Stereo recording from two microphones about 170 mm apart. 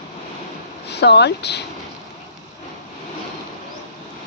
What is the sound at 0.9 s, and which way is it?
Speech, 80° left.